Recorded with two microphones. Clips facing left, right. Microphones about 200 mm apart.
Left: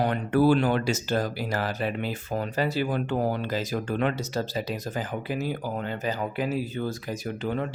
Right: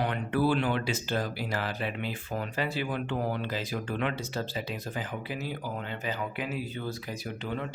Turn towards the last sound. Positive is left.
turn(degrees=45)  # may be behind; listen again after turning